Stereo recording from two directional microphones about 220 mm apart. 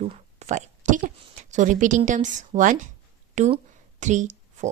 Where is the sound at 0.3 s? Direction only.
30° right (ahead or behind).